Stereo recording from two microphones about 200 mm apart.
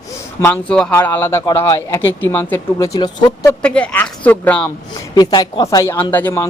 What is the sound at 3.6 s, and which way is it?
Speech, 5° left (ahead or behind).